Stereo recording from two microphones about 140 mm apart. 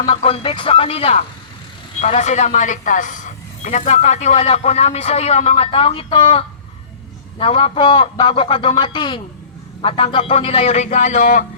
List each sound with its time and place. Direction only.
0.0 s speech: 45° left (ahead or behind)
2.0 s speech: 55° left (ahead or behind); by 11.4 s 70° left (ahead or behind)